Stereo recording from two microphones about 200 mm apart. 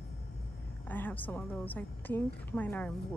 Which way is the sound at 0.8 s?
10° left (ahead or behind).